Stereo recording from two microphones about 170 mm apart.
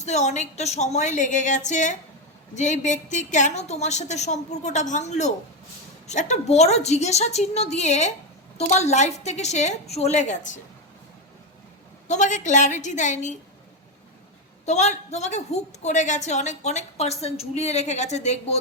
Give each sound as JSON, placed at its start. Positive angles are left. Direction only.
{"t": 0.0, "sound": "a woman's voice", "side_deg": 40}
{"t": 12.0, "sound": "a woman's voice", "side_deg": 45}
{"t": 14.6, "sound": "a woman's voice", "side_deg": 40}